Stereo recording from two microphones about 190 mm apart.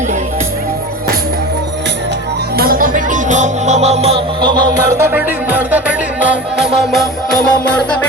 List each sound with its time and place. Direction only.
2.6 s music: 50° right (ahead or behind); by 7.0 s 5° right (ahead or behind)